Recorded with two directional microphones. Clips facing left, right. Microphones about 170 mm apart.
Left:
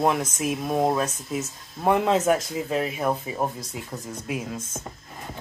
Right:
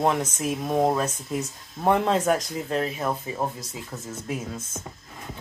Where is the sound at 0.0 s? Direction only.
5° left (ahead or behind).